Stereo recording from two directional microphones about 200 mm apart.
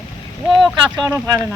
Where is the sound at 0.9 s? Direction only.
20° right (ahead or behind).